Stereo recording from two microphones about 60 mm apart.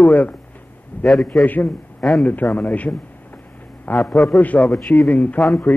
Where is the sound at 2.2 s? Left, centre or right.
Left.